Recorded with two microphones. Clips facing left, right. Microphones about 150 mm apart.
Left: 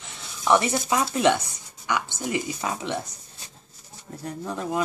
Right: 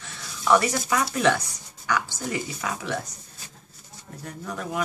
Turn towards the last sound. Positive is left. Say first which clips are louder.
# left 3 dB
turn(degrees=25)  # may be behind; listen again after turning